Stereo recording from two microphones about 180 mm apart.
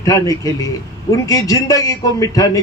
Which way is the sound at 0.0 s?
20° left (ahead or behind).